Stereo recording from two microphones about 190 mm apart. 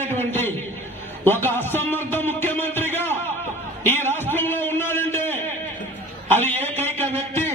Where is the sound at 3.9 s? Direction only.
10° left (ahead or behind).